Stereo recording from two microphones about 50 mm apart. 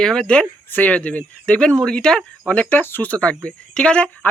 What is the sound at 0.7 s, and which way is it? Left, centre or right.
Speech, left.